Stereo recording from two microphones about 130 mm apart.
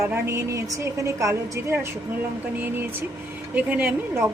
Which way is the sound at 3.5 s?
15° right (ahead or behind).